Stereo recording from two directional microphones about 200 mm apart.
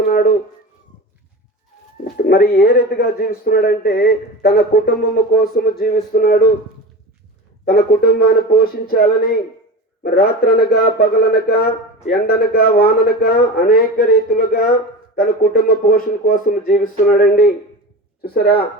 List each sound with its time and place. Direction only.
0.0 s dog: 50° left (ahead or behind)
2.1 s speech: 45° left (ahead or behind)
7.6 s speech: 50° left (ahead or behind)